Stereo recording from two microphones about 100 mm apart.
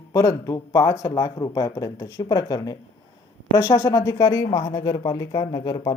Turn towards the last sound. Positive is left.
turn(degrees=35)  # may be behind; listen again after turning